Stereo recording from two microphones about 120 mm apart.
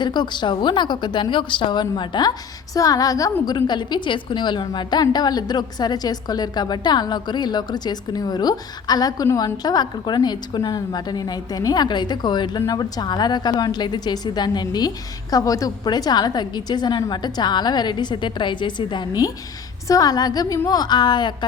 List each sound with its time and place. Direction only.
0.0 s a woman's voice: 40° left (ahead or behind)